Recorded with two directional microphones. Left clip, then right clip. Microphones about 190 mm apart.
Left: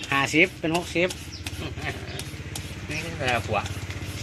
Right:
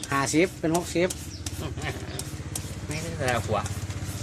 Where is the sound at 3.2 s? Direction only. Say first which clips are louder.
Left 1 dB; centre (ahead or behind).